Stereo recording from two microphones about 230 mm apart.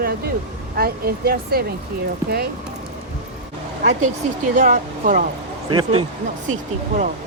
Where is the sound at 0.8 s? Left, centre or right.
Right.